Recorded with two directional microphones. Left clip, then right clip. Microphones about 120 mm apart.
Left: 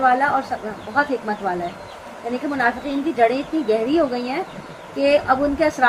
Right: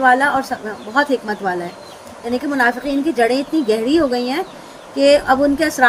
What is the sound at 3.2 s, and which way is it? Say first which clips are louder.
A woman's voice: even; 90° right.